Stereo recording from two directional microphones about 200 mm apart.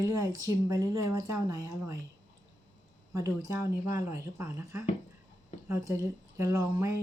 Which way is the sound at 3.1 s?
15° right (ahead or behind).